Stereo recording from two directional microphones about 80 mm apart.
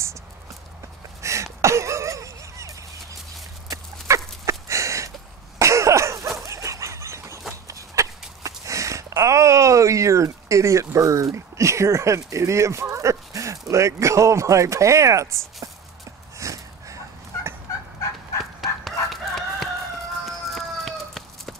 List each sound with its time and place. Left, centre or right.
1.2 s a sound: right
3.7 s dog: right
5.6 s cough: right
7.6 s walk: right
8.4 s a sound: right
18.4 s chicken: centre
20.2 s livestock: centre